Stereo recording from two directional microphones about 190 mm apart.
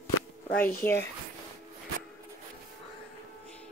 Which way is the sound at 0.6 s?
50° left (ahead or behind).